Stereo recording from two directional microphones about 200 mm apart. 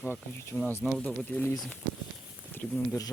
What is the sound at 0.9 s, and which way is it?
Speech, centre (ahead or behind).